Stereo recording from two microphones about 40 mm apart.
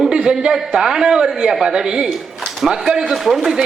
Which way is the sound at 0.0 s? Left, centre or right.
Centre.